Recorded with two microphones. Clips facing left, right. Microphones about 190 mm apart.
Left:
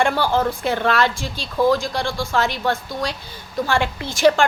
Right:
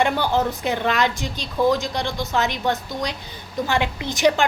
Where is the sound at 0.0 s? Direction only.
20° right (ahead or behind).